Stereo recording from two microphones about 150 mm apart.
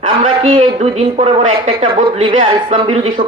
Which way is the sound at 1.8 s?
55° right (ahead or behind).